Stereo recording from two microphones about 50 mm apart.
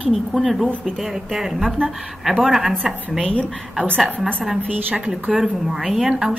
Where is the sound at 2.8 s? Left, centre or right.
Centre.